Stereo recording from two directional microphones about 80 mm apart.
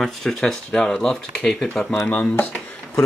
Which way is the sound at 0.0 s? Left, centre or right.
Centre.